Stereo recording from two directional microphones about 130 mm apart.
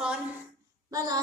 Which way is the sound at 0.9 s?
30° right (ahead or behind).